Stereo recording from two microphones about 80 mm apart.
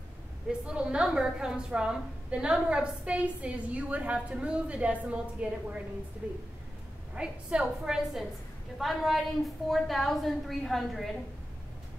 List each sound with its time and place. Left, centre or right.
0.5 s a woman's voice: centre